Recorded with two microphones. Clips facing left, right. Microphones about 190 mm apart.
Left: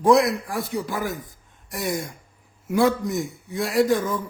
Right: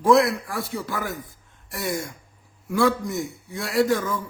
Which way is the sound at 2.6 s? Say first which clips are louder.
Left 1 dB; 20° left (ahead or behind).